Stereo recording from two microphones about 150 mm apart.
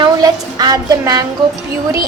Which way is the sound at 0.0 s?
25° right (ahead or behind).